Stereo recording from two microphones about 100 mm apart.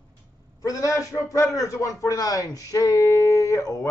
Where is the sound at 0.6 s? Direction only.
35° left (ahead or behind).